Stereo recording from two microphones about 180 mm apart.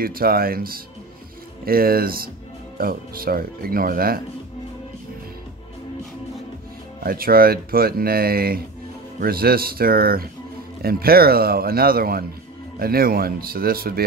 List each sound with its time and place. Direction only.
0.0 s speech: 55° right (ahead or behind)
7.0 s speech: 55° right (ahead or behind)